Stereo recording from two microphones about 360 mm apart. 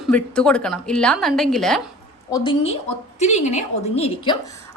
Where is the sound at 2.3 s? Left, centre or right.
Centre.